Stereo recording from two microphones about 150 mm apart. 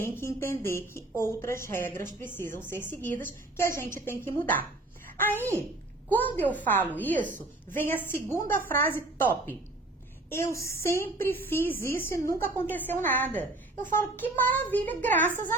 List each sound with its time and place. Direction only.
0.0 s speech: 15° left (ahead or behind)